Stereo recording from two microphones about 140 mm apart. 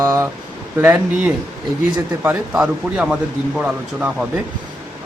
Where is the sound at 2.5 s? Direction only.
5° right (ahead or behind).